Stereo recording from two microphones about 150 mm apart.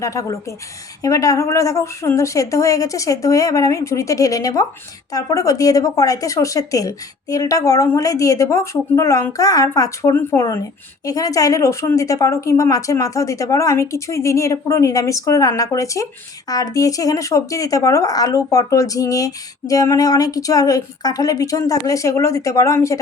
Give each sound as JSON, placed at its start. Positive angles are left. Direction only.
{"t": 0.0, "sound": "speech", "side_deg": 20}